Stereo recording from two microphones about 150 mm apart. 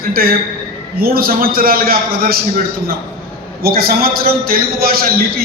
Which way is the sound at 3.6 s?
80° right.